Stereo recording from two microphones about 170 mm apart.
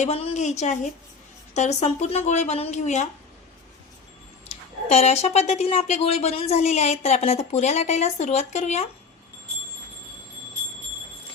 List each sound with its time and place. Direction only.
0.0 s a woman's voice: 40° left (ahead or behind)
4.4 s speech: 40° left (ahead or behind)